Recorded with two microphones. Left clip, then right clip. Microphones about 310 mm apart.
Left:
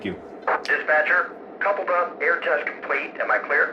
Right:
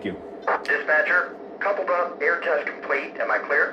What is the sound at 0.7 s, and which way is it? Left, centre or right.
Speech, centre.